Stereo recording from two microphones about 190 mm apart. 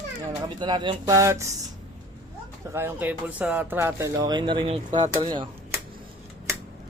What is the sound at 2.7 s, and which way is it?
Speech, 10° right (ahead or behind).